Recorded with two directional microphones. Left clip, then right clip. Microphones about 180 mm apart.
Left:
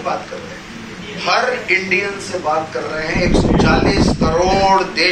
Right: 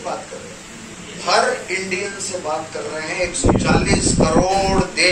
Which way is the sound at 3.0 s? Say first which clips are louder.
Left 5 dB; centre (ahead or behind).